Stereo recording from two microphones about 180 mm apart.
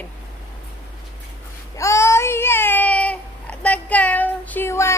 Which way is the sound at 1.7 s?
15° left (ahead or behind).